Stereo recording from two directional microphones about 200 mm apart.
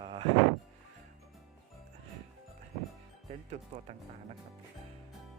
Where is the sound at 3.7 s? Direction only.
35° right (ahead or behind).